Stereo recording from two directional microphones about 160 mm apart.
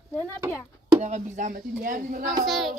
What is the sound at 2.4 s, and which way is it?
Speech, centre (ahead or behind).